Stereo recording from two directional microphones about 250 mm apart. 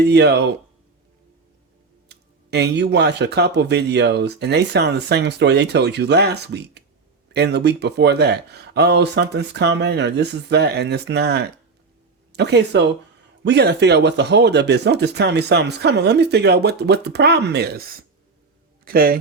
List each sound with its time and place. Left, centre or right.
0.0 s speech: right
2.0 s speech: right